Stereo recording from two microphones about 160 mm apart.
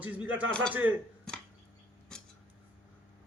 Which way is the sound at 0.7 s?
10° right (ahead or behind).